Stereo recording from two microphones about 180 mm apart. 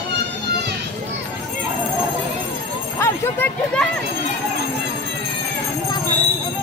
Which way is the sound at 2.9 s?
15° left (ahead or behind).